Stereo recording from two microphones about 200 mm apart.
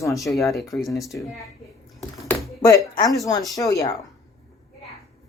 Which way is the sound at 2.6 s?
15° left (ahead or behind).